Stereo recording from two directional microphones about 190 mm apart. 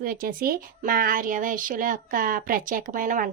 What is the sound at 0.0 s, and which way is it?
Speech, 50° right (ahead or behind).